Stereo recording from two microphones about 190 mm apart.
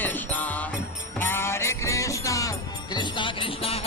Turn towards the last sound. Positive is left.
turn(degrees=30)  # may be behind; listen again after turning